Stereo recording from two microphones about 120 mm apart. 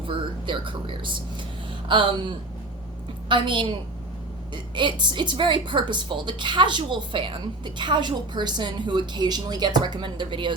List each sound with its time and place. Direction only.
0.0 s a woman's voice: 45° right (ahead or behind)